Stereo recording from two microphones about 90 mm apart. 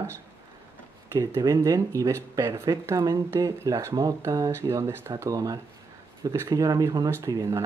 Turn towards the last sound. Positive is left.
turn(degrees=-40)  # may be behind; listen again after turning